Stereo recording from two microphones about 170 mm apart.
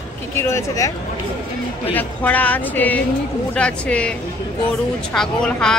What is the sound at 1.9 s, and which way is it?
Speech, 10° left (ahead or behind).